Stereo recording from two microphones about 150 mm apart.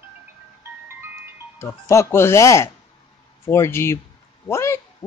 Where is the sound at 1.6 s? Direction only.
20° left (ahead or behind).